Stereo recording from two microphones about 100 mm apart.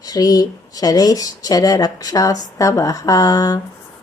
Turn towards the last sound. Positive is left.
turn(degrees=35)  # may be behind; listen again after turning